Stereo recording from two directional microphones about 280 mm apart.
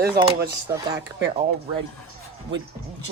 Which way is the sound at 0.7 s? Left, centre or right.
Centre.